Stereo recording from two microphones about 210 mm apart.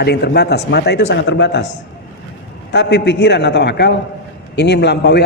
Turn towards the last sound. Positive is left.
turn(degrees=55)  # may be behind; listen again after turning